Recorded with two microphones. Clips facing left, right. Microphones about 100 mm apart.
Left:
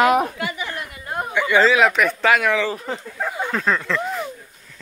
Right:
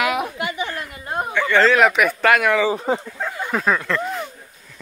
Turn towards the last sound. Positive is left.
turn(degrees=0)  # may be behind; listen again after turning